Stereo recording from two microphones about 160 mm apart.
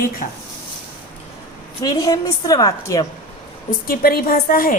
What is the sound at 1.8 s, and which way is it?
A woman's voice, 25° left (ahead or behind).